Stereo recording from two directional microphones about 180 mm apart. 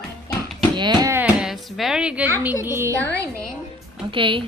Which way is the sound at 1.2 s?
5° right (ahead or behind).